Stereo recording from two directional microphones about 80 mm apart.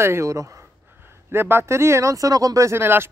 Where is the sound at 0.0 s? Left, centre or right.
Right.